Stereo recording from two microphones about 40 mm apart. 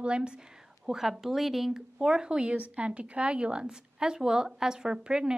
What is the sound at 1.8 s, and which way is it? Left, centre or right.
Speech, centre.